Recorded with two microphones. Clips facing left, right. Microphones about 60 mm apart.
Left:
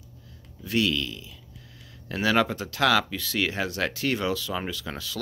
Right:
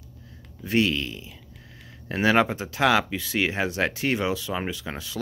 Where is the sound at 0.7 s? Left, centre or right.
Right.